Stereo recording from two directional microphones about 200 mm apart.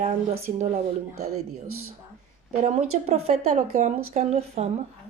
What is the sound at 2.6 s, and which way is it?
Speech, 35° right (ahead or behind).